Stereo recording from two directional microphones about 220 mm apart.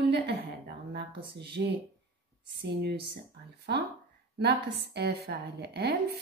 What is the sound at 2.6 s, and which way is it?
Speech, 50° right (ahead or behind).